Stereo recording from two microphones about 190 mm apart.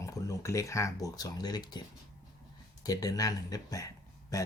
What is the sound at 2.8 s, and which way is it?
Speech, 20° left (ahead or behind).